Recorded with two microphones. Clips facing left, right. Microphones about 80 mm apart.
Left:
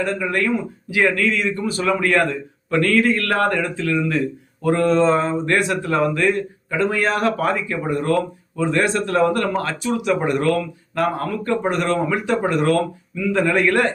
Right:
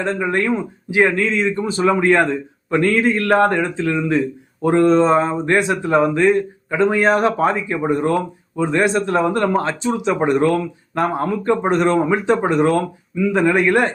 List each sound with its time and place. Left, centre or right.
0.0 s a man's voice: right